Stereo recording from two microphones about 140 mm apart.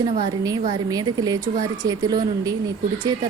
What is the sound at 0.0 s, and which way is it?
Speech, 30° right (ahead or behind).